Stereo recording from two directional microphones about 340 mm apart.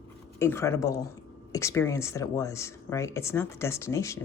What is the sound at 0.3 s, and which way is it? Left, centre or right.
Speech, centre.